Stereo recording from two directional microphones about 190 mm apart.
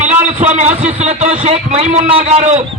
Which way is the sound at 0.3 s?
40° right (ahead or behind).